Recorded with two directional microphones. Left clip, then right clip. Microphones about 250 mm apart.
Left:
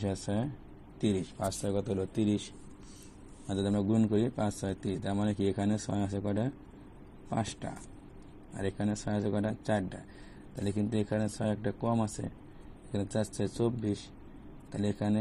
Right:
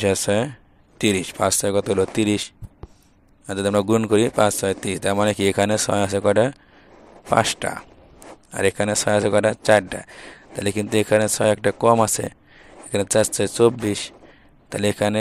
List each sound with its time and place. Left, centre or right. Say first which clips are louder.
0.0 s speech: right 16 dB; right
3.4 s speech: right 13 dB; right